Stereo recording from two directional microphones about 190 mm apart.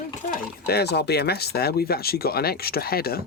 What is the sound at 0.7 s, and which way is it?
Speech, 60° left (ahead or behind).